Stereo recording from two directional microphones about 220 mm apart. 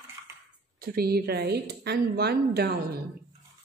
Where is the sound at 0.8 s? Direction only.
45° right (ahead or behind).